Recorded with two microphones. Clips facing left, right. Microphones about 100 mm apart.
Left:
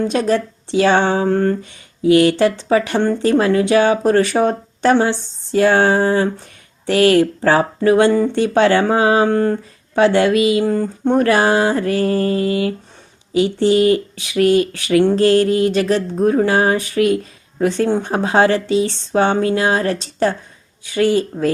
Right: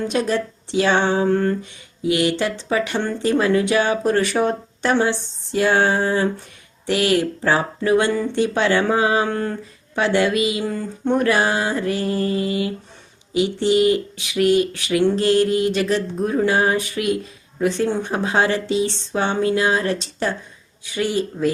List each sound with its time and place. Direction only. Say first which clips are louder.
0.0 s speech: left 4 dB; 40° left (ahead or behind)
12.5 s speech: left 5 dB; 20° right (ahead or behind)
13.3 s speech: left 4 dB; 40° left (ahead or behind)